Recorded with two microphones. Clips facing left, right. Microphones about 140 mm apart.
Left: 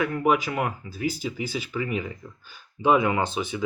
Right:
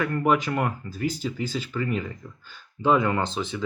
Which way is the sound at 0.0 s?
5° left (ahead or behind).